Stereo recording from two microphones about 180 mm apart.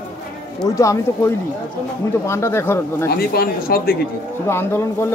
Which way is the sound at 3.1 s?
60° left (ahead or behind).